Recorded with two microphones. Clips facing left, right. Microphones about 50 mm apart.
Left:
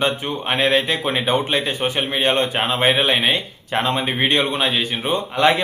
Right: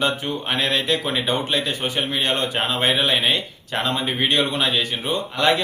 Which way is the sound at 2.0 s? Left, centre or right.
Centre.